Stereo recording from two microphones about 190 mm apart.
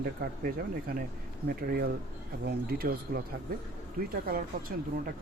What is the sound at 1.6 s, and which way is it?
Speech, 55° right (ahead or behind).